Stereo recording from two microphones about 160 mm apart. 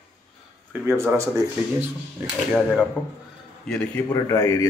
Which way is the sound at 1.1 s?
20° right (ahead or behind).